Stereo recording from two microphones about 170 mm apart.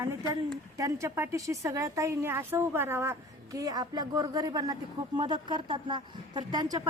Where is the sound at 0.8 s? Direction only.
20° right (ahead or behind).